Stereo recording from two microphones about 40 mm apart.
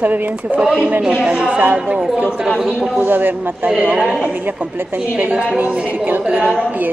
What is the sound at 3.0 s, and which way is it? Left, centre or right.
Speech, right.